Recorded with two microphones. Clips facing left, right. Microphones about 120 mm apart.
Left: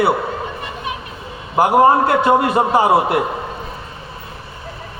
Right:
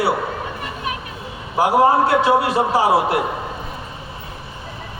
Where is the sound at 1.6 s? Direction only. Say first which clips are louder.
Left 2 dB; 55° left (ahead or behind).